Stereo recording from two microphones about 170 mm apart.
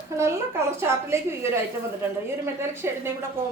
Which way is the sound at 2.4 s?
15° right (ahead or behind).